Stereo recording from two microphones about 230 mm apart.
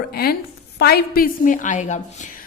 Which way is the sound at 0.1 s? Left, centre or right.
Left.